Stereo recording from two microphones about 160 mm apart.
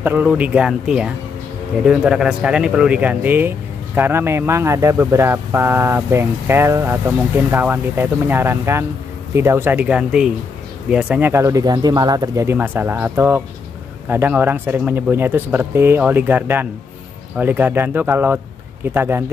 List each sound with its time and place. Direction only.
0.0 s speech: 15° right (ahead or behind)